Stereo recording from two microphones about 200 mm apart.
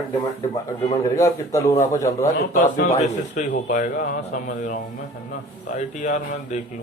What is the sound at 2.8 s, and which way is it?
A man's voice, 35° left (ahead or behind).